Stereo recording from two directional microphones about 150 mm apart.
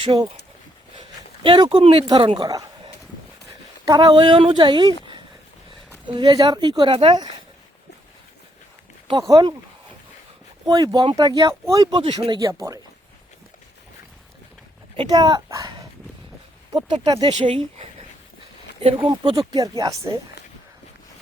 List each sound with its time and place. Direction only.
0.0 s speech: 30° right (ahead or behind)
1.4 s speech: 35° right (ahead or behind)
1.8 s speech: 40° right (ahead or behind)
3.8 s speech: 25° right (ahead or behind)
6.1 s speech: 30° right (ahead or behind)
9.3 s speech: 25° right (ahead or behind)
10.7 s speech: 25° right (ahead or behind)
12.4 s speech: 20° right (ahead or behind)
15.1 s speech: 30° right (ahead or behind)
16.7 s speech: 25° right (ahead or behind)
19.0 s speech: 35° right (ahead or behind)
19.5 s speech: 25° right (ahead or behind)